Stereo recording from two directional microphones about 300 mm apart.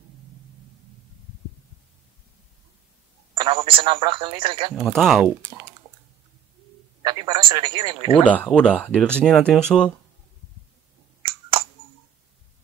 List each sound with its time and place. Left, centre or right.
3.3 s speech: centre
4.7 s speech: centre
7.0 s a man's voice: centre
8.2 s speech: centre